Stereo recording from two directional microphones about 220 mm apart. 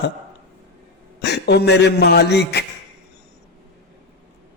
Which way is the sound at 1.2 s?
50° left (ahead or behind).